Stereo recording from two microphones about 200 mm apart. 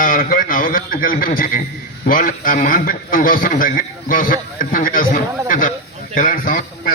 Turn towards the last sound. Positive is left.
turn(degrees=45)  # may be behind; listen again after turning